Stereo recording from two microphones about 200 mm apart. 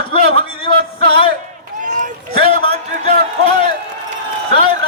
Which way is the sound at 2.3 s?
25° left (ahead or behind).